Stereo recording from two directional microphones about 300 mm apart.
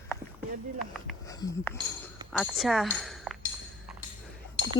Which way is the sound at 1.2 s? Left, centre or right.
Centre.